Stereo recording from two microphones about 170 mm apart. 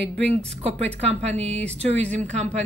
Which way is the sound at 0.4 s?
40° right (ahead or behind).